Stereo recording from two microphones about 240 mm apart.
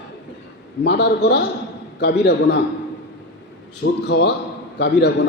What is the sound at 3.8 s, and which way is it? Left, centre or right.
A man's voice, left.